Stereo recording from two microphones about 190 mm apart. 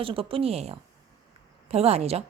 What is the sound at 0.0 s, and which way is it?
A woman's voice, 30° right (ahead or behind).